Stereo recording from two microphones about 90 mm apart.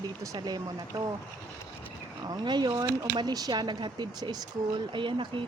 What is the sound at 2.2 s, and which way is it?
Speech, 50° right (ahead or behind).